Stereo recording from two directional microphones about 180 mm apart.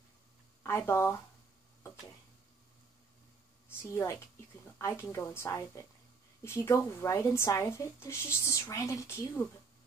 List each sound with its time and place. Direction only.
0.7 s speech: 15° left (ahead or behind)
3.7 s a woman's voice: 15° left (ahead or behind)